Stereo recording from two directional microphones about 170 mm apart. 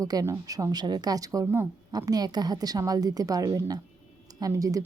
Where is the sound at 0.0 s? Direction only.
20° right (ahead or behind).